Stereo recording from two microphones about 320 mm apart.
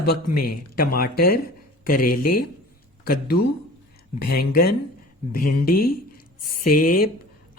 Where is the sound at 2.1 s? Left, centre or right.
Left.